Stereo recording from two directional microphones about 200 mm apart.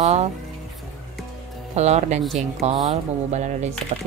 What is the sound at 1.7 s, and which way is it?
Speech, 35° right (ahead or behind).